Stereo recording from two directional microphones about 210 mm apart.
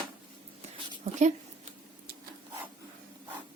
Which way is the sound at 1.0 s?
35° right (ahead or behind).